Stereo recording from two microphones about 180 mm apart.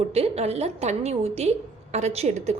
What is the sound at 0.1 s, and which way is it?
A woman's voice, 35° right (ahead or behind).